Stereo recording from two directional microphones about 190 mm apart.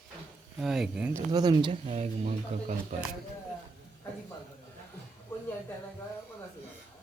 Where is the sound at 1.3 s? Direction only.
20° right (ahead or behind).